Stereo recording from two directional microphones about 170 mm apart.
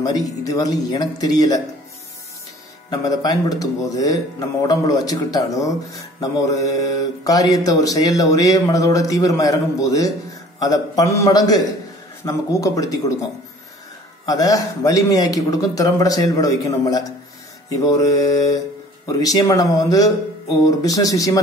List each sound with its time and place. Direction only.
0.0 s speech: 20° left (ahead or behind)
2.9 s speech: 20° left (ahead or behind)
14.2 s speech: 20° left (ahead or behind)